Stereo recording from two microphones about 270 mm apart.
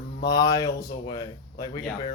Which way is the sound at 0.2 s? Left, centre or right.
Centre.